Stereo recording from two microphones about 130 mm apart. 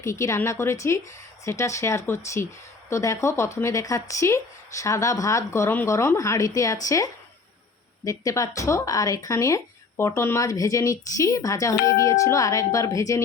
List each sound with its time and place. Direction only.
0.0 s speech: 20° left (ahead or behind)